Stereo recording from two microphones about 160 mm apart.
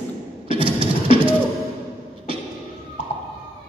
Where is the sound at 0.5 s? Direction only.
35° right (ahead or behind).